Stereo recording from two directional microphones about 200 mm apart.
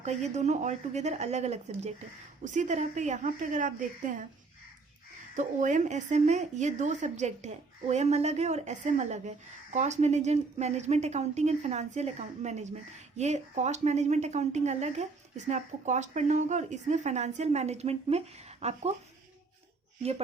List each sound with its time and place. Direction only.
0.0 s speech: 35° right (ahead or behind)
5.4 s speech: 40° right (ahead or behind)
20.0 s speech: 30° right (ahead or behind)